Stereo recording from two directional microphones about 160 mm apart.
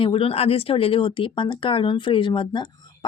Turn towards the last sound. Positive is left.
turn(degrees=30)  # may be behind; listen again after turning